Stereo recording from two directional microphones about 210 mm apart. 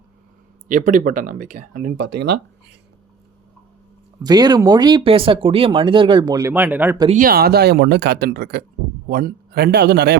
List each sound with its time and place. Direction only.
0.7 s speech: 40° right (ahead or behind); by 2.4 s 55° right (ahead or behind)
4.2 s speech: 20° right (ahead or behind)
7.1 s speech: 45° right (ahead or behind)